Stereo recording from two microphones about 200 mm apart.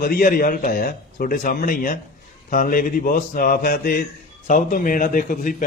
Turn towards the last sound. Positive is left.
turn(degrees=40)  # may be behind; listen again after turning